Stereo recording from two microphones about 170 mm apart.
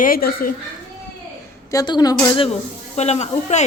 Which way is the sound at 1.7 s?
25° left (ahead or behind).